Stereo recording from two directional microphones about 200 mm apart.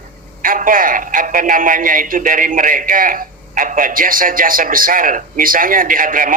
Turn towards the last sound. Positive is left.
turn(degrees=-45)  # may be behind; listen again after turning